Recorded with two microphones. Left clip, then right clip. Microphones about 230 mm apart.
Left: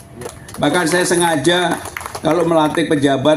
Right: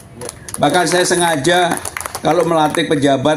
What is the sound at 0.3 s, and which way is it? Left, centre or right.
A man's voice, right.